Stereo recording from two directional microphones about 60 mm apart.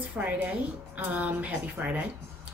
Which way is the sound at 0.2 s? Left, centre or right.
Right.